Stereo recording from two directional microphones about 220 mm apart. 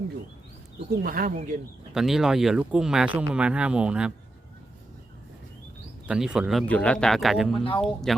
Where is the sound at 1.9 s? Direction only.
Centre (ahead or behind).